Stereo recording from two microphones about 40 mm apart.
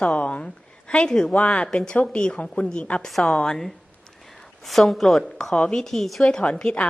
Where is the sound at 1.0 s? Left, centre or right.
Centre.